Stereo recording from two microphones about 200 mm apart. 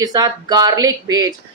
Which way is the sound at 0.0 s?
20° right (ahead or behind).